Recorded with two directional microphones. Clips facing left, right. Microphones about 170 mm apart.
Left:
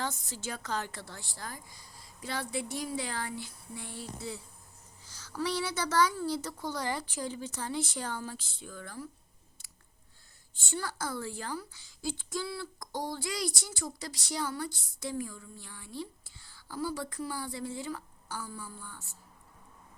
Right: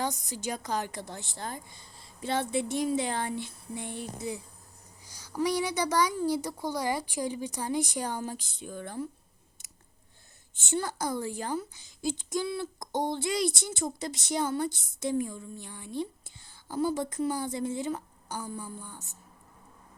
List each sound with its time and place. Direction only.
0.0 s a woman's voice: 15° right (ahead or behind)
10.5 s a woman's voice: 20° right (ahead or behind)